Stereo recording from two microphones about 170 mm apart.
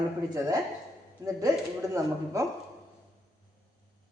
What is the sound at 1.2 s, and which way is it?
Speech, 20° right (ahead or behind).